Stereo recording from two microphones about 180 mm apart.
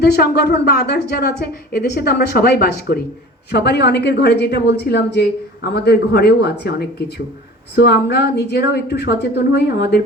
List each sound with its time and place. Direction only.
0.0 s a woman's voice: 65° left (ahead or behind)